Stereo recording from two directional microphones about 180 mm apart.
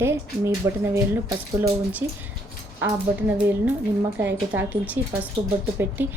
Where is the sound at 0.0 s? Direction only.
15° right (ahead or behind).